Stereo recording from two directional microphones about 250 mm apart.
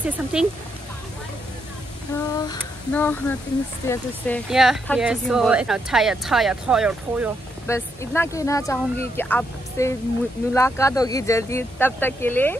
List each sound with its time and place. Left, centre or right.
0.0 s speech: centre
2.3 s speech: centre
4.5 s speech: centre
7.6 s speech: centre